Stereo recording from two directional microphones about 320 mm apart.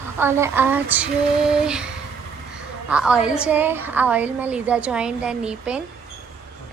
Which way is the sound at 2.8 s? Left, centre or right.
Centre.